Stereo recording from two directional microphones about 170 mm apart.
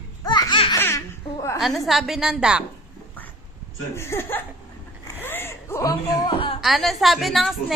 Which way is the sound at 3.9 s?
15° left (ahead or behind).